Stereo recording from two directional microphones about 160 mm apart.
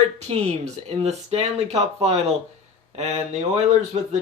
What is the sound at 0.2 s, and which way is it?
Speech, 40° right (ahead or behind).